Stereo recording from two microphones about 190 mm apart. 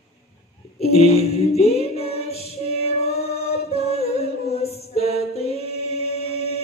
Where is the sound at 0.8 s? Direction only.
35° left (ahead or behind).